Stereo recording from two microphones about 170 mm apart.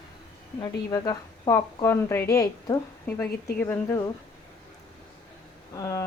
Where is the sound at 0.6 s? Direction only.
20° left (ahead or behind).